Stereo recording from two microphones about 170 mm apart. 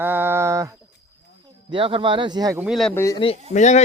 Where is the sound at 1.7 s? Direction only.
30° right (ahead or behind).